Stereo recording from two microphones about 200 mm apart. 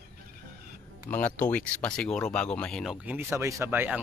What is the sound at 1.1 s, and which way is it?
Speech, 10° left (ahead or behind).